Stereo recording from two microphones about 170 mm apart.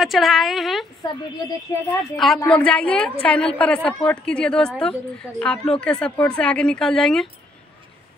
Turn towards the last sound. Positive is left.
turn(degrees=5)  # may be behind; listen again after turning